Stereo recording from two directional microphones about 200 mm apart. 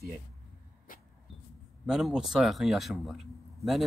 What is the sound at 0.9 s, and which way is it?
Vehicle, 45° left (ahead or behind).